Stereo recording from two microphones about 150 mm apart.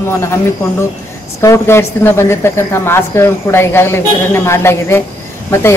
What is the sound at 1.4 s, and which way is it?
A man's voice, 20° left (ahead or behind).